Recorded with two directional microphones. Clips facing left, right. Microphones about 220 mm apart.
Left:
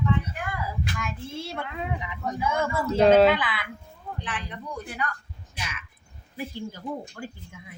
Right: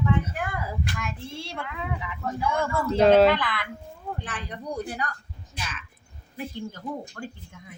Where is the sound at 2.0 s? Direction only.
20° left (ahead or behind).